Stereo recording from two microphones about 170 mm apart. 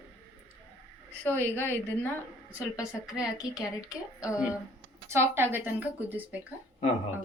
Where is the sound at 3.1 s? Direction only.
5° right (ahead or behind).